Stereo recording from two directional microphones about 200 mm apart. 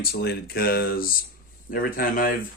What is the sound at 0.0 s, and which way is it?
Speech, 50° left (ahead or behind).